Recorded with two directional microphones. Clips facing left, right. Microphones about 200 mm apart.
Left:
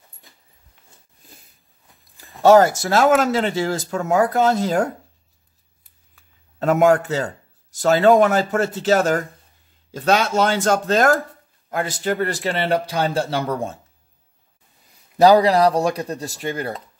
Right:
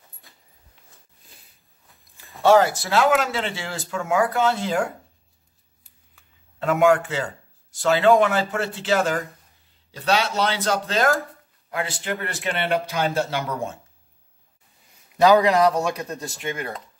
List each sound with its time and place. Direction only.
2.4 s speech: 45° left (ahead or behind)
6.6 s speech: 40° left (ahead or behind)
15.1 s speech: 35° left (ahead or behind)